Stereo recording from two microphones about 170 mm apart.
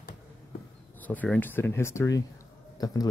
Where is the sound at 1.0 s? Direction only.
10° left (ahead or behind).